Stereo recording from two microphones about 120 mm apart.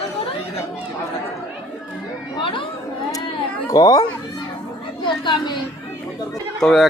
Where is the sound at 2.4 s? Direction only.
45° left (ahead or behind).